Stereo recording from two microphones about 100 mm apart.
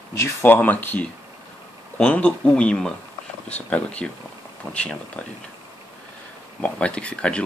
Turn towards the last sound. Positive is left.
turn(degrees=10)  # may be behind; listen again after turning